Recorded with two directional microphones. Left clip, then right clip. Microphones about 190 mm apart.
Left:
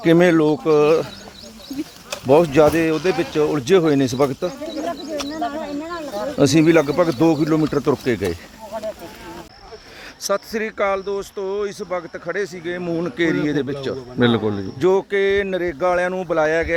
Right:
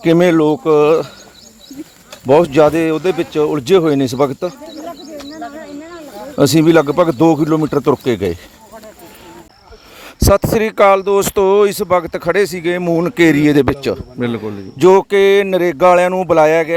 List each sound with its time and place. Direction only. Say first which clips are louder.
0.0 s speech: right 3 dB; 25° right (ahead or behind)
2.2 s speech: right 4 dB; 25° right (ahead or behind)
5.3 s a sound: left 3 dB; 5° right (ahead or behind)
6.4 s speech: right 4 dB; 20° right (ahead or behind)
7.4 s speech: right 4 dB; 10° right (ahead or behind)
7.9 s speech: right 5 dB; 25° right (ahead or behind)
10.2 s a sound: right 10 dB; 30° right (ahead or behind)
10.5 s speech: right 11 dB; 35° right (ahead or behind)
11.2 s speech: right 13 dB; 45° right (ahead or behind)
12.8 s speech: right 9 dB; 25° right (ahead or behind)
14.2 s a man's voice: left 3 dB; centre (ahead or behind)
14.8 s speech: right 9 dB; 35° right (ahead or behind)